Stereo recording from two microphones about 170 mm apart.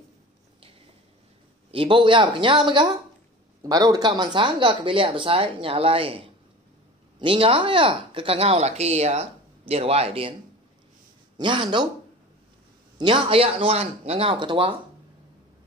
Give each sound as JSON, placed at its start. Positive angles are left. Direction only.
{"t": 1.7, "sound": "speech", "side_deg": -30}
{"t": 11.3, "sound": "speech", "side_deg": -25}
{"t": 12.9, "sound": "speech", "side_deg": -30}